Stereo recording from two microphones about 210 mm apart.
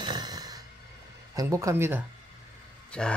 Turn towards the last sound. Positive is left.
turn(degrees=5)  # may be behind; listen again after turning